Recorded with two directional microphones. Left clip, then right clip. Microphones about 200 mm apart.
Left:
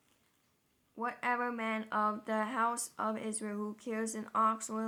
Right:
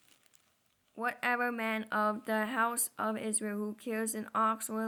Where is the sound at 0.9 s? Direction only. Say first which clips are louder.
Right 2 dB; 30° right (ahead or behind).